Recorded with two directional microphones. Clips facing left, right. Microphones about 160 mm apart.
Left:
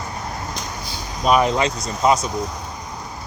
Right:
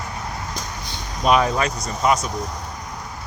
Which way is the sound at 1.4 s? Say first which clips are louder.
Left 2 dB; 25° left (ahead or behind).